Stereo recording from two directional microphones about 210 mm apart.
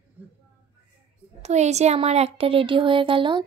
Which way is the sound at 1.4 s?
30° right (ahead or behind).